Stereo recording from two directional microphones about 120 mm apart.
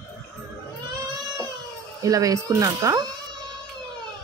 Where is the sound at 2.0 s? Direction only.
30° right (ahead or behind).